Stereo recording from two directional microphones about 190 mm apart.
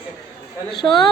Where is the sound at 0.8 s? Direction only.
25° left (ahead or behind).